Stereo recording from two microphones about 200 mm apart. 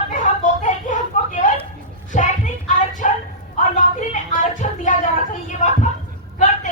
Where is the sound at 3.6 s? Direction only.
40° left (ahead or behind).